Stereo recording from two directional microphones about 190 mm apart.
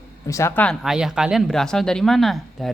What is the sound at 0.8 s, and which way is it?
Speech, 5° right (ahead or behind).